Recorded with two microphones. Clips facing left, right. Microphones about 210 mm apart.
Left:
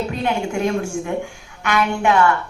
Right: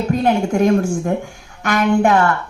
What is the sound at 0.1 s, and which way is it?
A woman's voice, 45° right (ahead or behind).